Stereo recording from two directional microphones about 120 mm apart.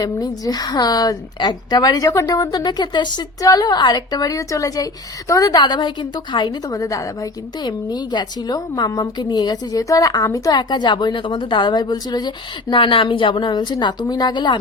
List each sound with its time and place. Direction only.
0.0 s a woman's voice: 35° left (ahead or behind)